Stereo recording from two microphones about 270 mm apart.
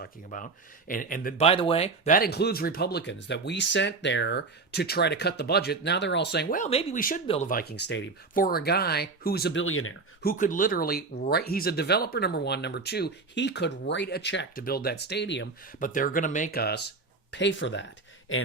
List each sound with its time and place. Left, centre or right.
0.0 s speech: left
10.2 s speech: left